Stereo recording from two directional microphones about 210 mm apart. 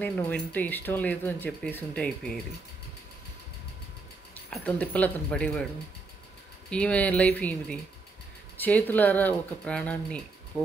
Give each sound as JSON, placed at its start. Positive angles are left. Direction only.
{"t": 0.0, "sound": "speech", "side_deg": 10}
{"t": 4.5, "sound": "speech", "side_deg": 5}
{"t": 6.7, "sound": "speech", "side_deg": 5}